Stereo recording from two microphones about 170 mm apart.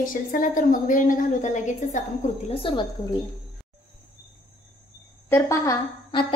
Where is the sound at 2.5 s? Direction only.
30° left (ahead or behind).